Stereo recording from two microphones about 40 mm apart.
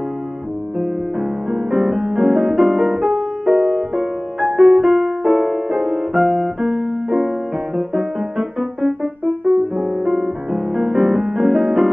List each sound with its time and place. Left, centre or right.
0.7 s music: centre